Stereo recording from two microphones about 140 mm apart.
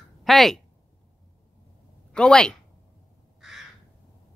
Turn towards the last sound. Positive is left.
turn(degrees=-5)  # may be behind; listen again after turning